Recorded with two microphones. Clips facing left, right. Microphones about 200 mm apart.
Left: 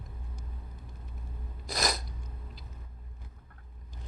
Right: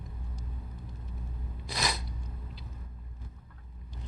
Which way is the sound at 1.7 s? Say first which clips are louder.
Left 2 dB; 40° left (ahead or behind).